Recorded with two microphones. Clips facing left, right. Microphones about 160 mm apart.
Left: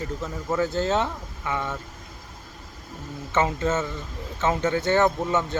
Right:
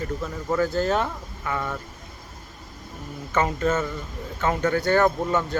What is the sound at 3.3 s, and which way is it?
Speech, 20° left (ahead or behind).